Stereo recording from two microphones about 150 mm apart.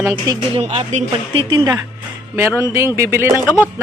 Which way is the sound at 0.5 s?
40° right (ahead or behind).